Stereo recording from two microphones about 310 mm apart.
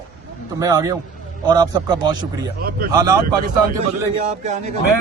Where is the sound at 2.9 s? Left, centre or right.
Centre.